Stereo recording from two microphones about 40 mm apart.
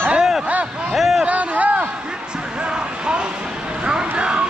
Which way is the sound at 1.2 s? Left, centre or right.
Right.